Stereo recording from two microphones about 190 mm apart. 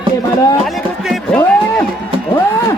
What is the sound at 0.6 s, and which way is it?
Music, centre (ahead or behind).